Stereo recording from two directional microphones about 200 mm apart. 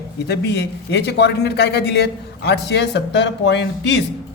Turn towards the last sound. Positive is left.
turn(degrees=60)  # may be behind; listen again after turning